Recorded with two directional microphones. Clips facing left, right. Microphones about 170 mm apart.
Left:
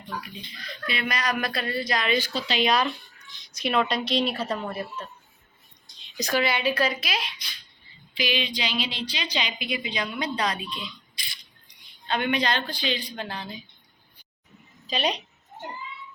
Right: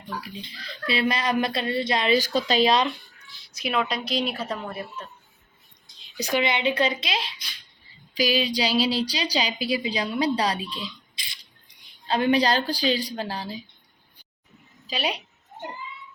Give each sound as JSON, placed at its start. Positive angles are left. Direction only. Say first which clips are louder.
{"t": 0.2, "sound": "speech", "louder": "right 2 dB", "side_deg": -30}
{"t": 2.6, "sound": "speech", "louder": "right 2 dB", "side_deg": -25}
{"t": 3.3, "sound": "a woman's voice", "louder": "left 2 dB", "side_deg": -5}
{"t": 6.1, "sound": "speech", "louder": "right 1 dB", "side_deg": -15}
{"t": 8.1, "sound": "a woman's voice", "louder": "right 5 dB", "side_deg": -40}
{"t": 14.8, "sound": "a woman's voice", "louder": "left 2 dB", "side_deg": -5}